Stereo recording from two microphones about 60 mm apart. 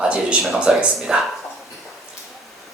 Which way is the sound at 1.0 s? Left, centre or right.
Centre.